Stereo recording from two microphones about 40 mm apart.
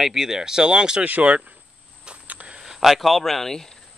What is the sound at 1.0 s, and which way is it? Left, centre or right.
Speech, right.